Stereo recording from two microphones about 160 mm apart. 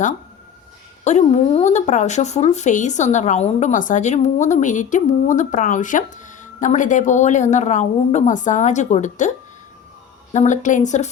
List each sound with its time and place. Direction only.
1.0 s speech: 45° left (ahead or behind)
10.3 s speech: 50° left (ahead or behind)